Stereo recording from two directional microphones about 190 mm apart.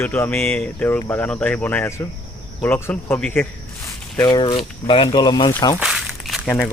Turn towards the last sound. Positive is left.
turn(degrees=0)  # may be behind; listen again after turning